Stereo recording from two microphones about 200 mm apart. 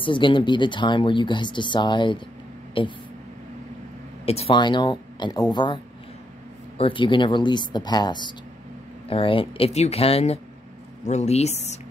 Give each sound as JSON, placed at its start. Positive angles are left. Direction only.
{"t": 0.0, "sound": "speech", "side_deg": 25}
{"t": 4.3, "sound": "speech", "side_deg": 30}
{"t": 6.8, "sound": "speech", "side_deg": 25}